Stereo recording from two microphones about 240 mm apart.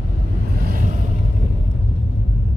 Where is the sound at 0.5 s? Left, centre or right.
Right.